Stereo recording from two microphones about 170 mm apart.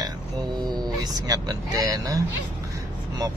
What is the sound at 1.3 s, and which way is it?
Speech, 20° right (ahead or behind).